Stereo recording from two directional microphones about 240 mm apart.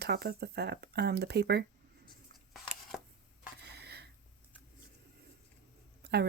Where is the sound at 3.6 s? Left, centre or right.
Right.